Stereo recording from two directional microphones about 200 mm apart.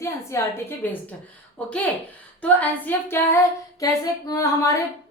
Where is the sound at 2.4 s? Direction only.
10° left (ahead or behind).